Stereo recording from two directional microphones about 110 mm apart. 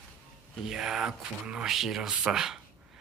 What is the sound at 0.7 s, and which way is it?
Speech, 5° right (ahead or behind).